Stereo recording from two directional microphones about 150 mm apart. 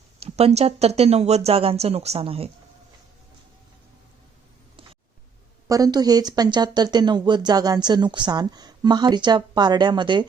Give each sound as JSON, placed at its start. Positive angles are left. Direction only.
{"t": 0.2, "sound": "speech", "side_deg": -45}
{"t": 5.6, "sound": "speech", "side_deg": -25}